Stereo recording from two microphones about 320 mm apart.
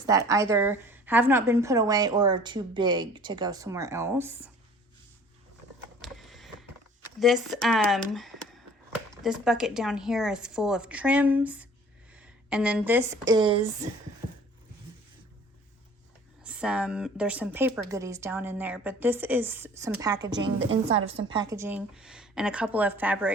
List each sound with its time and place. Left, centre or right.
0.0 s a woman's voice: centre
6.0 s a sound: centre
7.2 s speech: centre
7.9 s a sound: centre
9.2 s a woman's voice: centre
16.4 s speech: centre
20.6 s a woman's voice: right
21.2 s speech: centre